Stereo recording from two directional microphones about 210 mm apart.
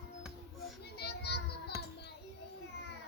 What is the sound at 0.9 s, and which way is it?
Children playing, 50° left (ahead or behind).